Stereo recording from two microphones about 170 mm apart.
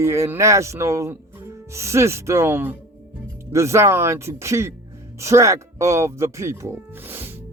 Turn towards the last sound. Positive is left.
turn(degrees=-10)  # may be behind; listen again after turning